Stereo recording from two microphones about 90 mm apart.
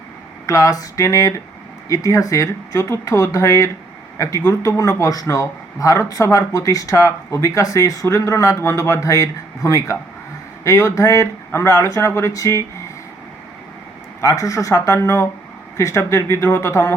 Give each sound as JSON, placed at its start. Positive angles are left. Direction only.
{"t": 0.4, "sound": "speech", "side_deg": 40}
{"t": 14.2, "sound": "speech", "side_deg": 35}